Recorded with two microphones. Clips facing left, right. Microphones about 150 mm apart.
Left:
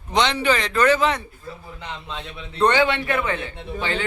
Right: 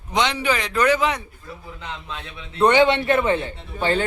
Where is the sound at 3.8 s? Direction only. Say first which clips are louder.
Right 5 dB; 40° right (ahead or behind).